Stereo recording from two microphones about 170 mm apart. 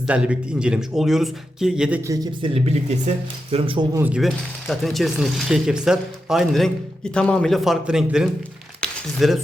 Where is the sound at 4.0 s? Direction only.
5° right (ahead or behind).